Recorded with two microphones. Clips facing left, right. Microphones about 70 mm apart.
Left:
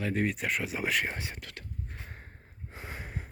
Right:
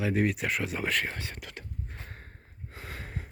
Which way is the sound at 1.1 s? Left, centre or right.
Centre.